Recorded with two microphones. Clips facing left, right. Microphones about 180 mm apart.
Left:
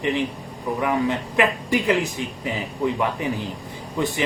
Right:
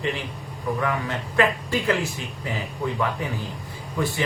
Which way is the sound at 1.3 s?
15° left (ahead or behind).